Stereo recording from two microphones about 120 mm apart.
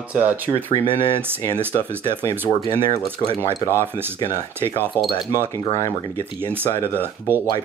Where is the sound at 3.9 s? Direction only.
20° right (ahead or behind).